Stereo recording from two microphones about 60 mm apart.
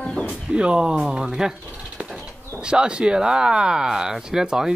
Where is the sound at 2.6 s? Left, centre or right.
Centre.